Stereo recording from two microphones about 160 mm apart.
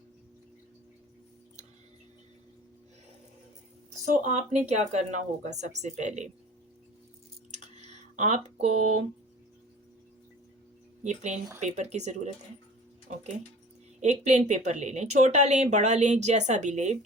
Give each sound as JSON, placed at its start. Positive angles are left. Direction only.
{"t": 4.0, "sound": "speech", "side_deg": -50}
{"t": 7.5, "sound": "a sound", "side_deg": -45}
{"t": 11.0, "sound": "speech", "side_deg": -50}